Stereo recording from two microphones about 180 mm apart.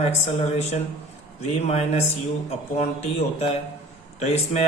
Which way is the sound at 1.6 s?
40° left (ahead or behind).